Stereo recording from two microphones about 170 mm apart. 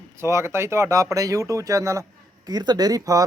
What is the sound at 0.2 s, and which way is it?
Speech, 15° right (ahead or behind).